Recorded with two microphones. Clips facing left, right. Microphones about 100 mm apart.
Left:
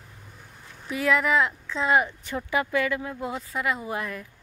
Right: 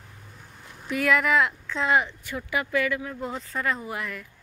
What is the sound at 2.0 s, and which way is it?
Speech, 20° left (ahead or behind).